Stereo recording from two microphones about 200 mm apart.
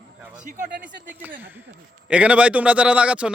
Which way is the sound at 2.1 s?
5° right (ahead or behind).